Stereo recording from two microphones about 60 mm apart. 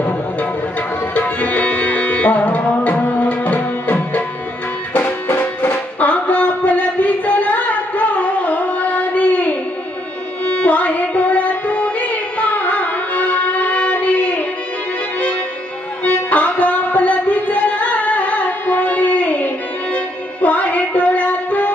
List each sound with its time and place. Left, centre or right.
1.1 s tabla: left
4.9 s music: left
16.0 s music: left